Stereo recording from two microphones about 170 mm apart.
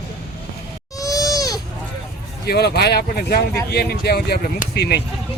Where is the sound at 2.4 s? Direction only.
70° left (ahead or behind).